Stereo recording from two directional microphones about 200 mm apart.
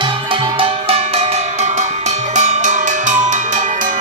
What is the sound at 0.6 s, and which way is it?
Music, 30° right (ahead or behind).